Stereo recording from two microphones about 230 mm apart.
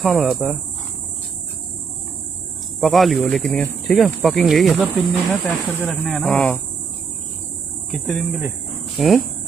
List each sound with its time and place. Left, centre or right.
0.0 s speech: centre
2.8 s speech: centre
7.9 s speech: centre